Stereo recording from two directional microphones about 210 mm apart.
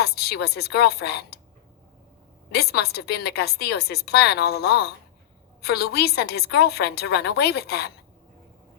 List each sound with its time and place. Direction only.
0.0 s speech: 50° left (ahead or behind)
2.5 s a woman's voice: 50° left (ahead or behind)